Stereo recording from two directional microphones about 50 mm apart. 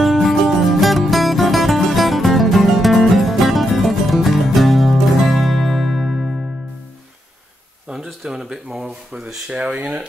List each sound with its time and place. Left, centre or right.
0.0 s music: centre
7.9 s speech: centre